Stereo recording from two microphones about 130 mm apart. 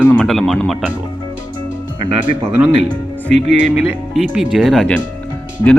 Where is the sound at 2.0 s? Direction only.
40° right (ahead or behind).